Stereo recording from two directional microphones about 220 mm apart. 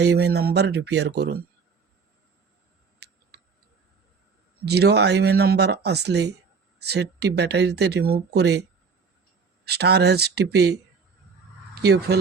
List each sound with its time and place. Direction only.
0.0 s speech: 50° right (ahead or behind)
3.0 s clicking: 45° right (ahead or behind)
4.6 s speech: 50° right (ahead or behind)
9.6 s speech: 50° right (ahead or behind)